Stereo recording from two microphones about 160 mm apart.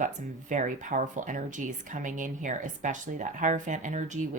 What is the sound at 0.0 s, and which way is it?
Speech, 50° right (ahead or behind).